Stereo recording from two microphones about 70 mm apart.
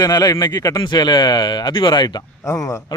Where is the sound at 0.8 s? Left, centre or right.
Left.